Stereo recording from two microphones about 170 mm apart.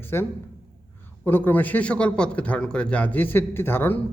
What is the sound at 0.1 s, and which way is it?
A man's voice, 15° left (ahead or behind).